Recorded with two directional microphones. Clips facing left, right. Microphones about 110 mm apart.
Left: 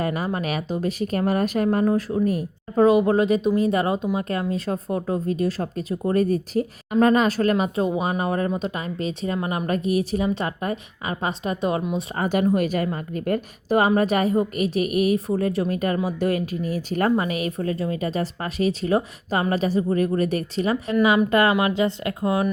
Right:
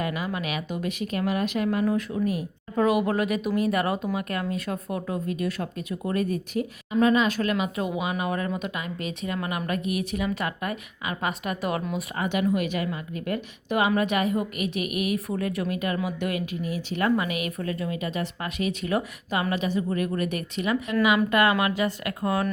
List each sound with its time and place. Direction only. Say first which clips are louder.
0.0 s a woman's voice: left 4 dB; 40° left (ahead or behind); by 12.0 s 25° left (ahead or behind)
12.1 s a woman's voice: left 4 dB; 40° left (ahead or behind); by 22.4 s 20° left (ahead or behind)